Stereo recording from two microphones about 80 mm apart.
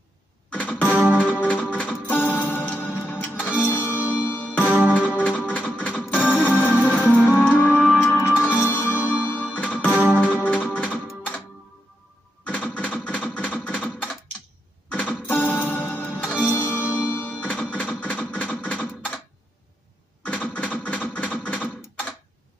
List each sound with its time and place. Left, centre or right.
0.5 s music: centre
8.5 s music: left
12.4 s a sound: centre
14.9 s music: centre
17.4 s music: centre
20.2 s a sound: centre